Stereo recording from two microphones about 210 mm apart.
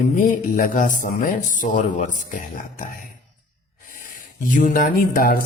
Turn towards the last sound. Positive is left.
turn(degrees=45)  # may be behind; listen again after turning